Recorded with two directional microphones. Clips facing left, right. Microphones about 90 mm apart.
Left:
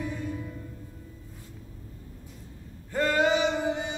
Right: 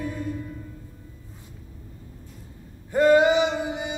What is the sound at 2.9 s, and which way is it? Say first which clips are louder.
Male singing: right 7 dB; 15° right (ahead or behind).